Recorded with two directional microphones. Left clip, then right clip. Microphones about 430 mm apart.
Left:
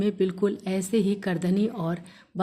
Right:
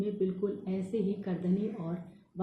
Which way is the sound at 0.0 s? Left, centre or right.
Left.